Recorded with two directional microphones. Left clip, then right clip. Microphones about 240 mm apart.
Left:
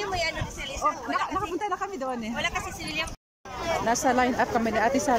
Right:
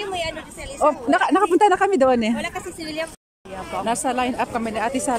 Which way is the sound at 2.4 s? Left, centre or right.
Right.